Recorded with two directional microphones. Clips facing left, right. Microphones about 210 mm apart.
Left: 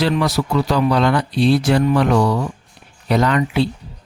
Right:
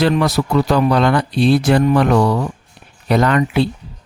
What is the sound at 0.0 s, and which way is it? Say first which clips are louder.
Speech: right 3 dB; 50° right (ahead or behind).